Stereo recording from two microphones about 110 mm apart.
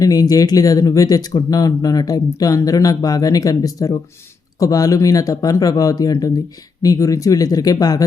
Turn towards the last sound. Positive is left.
turn(degrees=35)  # may be behind; listen again after turning